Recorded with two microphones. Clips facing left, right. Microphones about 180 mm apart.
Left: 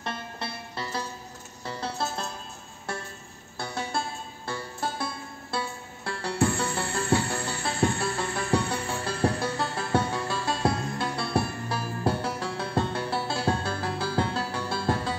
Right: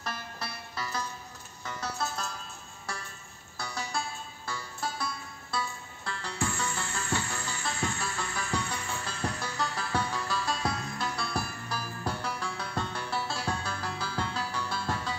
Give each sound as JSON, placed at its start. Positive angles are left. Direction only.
{"t": 0.0, "sound": "music", "side_deg": 25}
{"t": 3.5, "sound": "music", "side_deg": 25}